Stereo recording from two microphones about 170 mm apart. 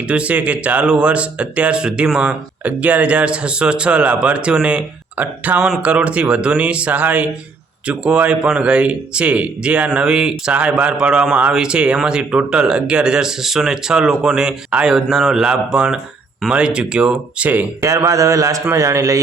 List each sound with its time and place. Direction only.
0.1 s speech: 5° right (ahead or behind)